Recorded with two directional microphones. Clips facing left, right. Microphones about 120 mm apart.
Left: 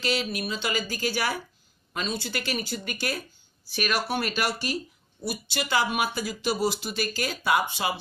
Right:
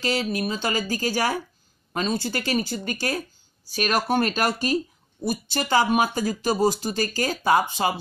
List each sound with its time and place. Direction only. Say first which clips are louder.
0.0 s speech: right 4 dB; 40° right (ahead or behind)